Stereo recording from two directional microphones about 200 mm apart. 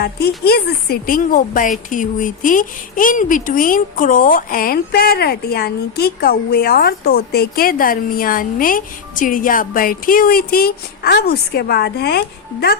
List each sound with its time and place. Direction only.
0.0 s speech: 50° left (ahead or behind)